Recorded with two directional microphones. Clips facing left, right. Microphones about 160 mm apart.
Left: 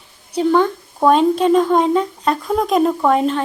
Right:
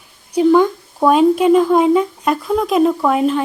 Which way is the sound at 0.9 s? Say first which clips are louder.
Right 2 dB; 5° right (ahead or behind).